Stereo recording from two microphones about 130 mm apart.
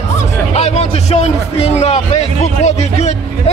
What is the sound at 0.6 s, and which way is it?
A man's voice, 55° left (ahead or behind).